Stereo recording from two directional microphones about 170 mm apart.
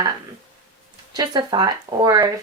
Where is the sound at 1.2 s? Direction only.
25° right (ahead or behind).